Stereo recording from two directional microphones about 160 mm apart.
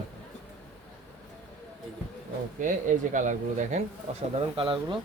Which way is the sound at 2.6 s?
55° right (ahead or behind).